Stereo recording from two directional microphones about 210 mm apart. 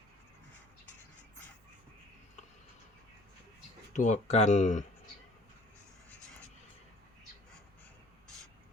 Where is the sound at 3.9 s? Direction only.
35° left (ahead or behind).